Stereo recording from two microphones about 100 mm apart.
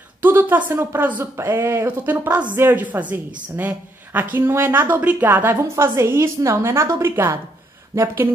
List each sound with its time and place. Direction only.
0.2 s speech: 20° right (ahead or behind)